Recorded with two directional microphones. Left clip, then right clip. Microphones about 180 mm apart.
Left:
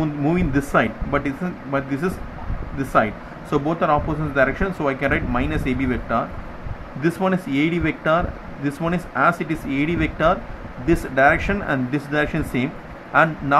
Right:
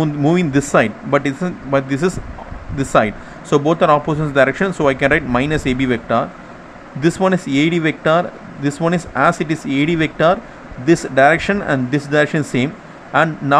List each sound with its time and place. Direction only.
0.0 s speech: 30° right (ahead or behind)